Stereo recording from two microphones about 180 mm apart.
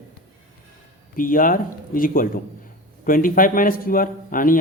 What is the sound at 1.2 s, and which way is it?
Speech, 50° left (ahead or behind).